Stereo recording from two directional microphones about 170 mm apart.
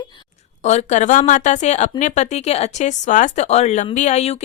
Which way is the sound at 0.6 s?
40° left (ahead or behind).